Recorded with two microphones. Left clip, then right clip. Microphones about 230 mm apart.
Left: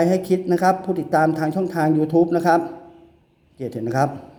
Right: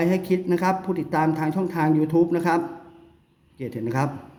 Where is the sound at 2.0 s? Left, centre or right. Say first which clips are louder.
Left 4 dB; right.